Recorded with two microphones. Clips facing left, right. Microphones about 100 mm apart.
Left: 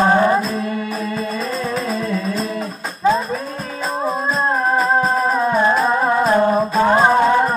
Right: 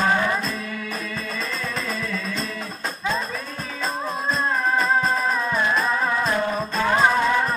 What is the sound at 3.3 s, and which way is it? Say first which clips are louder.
Music: left 7 dB; 30° left (ahead or behind).